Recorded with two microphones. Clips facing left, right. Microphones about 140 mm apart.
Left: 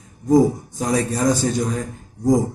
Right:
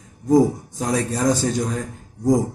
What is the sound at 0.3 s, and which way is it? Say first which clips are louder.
Speech: left 1 dB; centre (ahead or behind).